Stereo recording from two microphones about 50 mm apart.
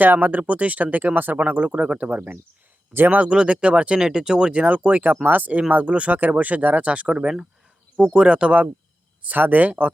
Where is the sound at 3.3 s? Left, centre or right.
Centre.